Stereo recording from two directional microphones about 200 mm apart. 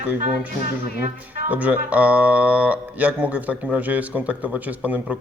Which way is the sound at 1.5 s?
5° right (ahead or behind).